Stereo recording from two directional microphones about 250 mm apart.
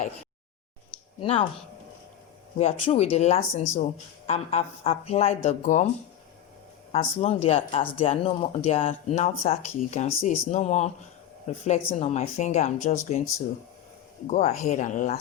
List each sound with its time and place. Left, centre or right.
1.2 s speech: centre
2.6 s speech: left
6.9 s speech: left
14.3 s speech: left